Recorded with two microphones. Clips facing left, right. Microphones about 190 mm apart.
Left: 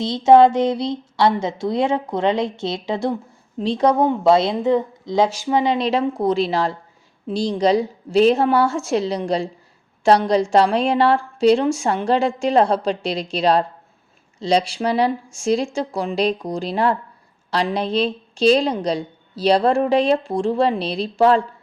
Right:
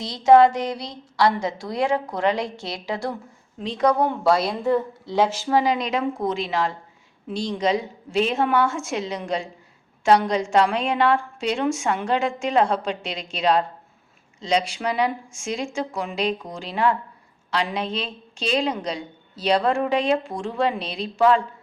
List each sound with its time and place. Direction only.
0.0 s a woman's voice: 25° left (ahead or behind)